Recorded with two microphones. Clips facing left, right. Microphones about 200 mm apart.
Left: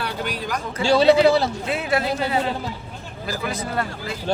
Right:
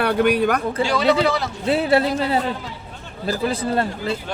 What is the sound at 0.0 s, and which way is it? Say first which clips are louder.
Speech: right 11 dB; 60° right (ahead or behind).